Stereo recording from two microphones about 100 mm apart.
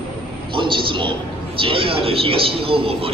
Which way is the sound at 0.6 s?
55° right (ahead or behind).